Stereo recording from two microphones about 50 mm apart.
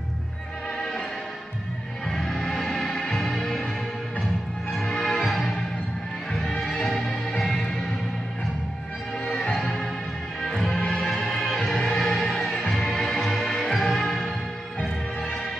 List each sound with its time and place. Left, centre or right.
2.0 s music: centre
4.6 s music: centre
6.6 s music: centre
9.4 s music: centre